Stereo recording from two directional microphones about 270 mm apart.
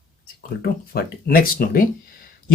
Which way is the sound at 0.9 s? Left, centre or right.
Left.